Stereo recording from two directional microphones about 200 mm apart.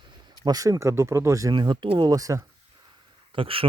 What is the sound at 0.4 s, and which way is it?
Speech, 20° right (ahead or behind).